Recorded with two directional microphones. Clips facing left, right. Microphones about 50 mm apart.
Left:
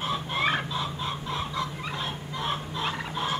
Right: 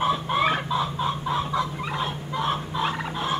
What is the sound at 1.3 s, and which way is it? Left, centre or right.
Fowl, centre.